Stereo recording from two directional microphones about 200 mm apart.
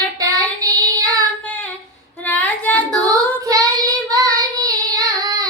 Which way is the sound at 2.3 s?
10° left (ahead or behind).